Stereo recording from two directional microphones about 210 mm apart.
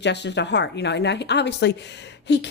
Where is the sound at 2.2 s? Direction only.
55° left (ahead or behind).